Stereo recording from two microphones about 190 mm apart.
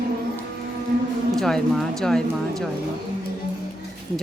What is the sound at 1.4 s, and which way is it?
Speech, centre (ahead or behind).